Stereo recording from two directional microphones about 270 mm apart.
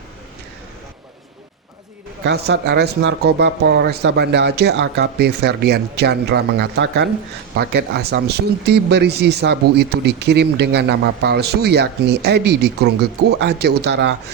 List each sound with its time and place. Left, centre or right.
2.2 s speech: right